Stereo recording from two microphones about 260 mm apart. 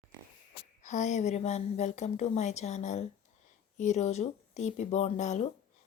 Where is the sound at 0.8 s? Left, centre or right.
Left.